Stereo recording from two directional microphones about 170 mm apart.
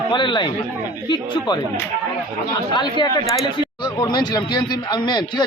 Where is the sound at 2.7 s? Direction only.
25° left (ahead or behind).